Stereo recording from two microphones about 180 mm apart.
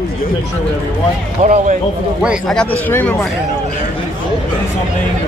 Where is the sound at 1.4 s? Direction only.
45° right (ahead or behind).